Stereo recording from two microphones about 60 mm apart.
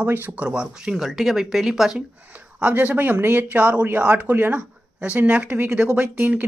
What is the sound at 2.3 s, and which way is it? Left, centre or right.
Speech, right.